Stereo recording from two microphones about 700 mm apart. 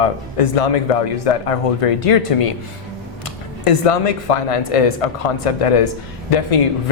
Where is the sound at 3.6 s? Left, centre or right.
Left.